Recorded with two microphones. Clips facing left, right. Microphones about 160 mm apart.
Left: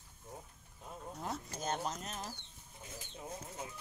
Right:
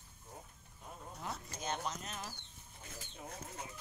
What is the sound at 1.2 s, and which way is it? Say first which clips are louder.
Speech: left 2 dB; 45° left (ahead or behind).